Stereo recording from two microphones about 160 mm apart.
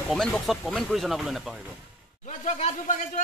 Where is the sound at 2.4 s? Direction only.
45° left (ahead or behind).